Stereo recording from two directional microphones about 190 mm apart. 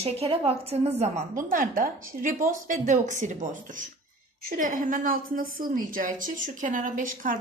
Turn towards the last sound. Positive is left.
turn(degrees=-45)  # may be behind; listen again after turning